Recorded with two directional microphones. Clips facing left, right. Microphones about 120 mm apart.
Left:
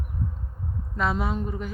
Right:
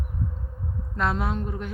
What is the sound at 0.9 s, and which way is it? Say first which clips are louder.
Speech: even; centre (ahead or behind).